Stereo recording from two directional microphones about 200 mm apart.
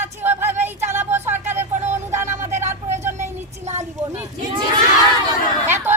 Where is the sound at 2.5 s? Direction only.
35° right (ahead or behind).